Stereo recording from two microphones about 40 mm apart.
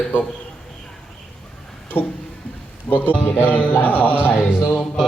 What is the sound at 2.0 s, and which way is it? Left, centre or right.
Music, left.